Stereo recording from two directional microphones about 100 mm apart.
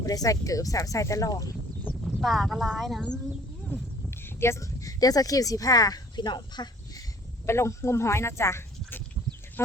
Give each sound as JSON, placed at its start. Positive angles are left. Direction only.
{"t": 0.0, "sound": "speech", "side_deg": 35}
{"t": 2.0, "sound": "speech", "side_deg": 0}
{"t": 4.2, "sound": "speech", "side_deg": 25}
{"t": 7.4, "sound": "speech", "side_deg": 30}